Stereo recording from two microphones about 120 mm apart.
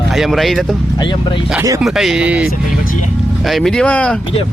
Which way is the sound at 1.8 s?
Centre (ahead or behind).